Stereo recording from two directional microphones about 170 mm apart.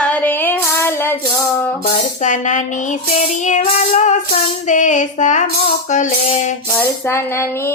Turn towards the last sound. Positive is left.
turn(degrees=45)  # may be behind; listen again after turning